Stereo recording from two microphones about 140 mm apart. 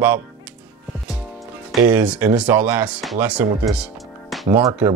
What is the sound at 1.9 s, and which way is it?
Speech, 10° right (ahead or behind).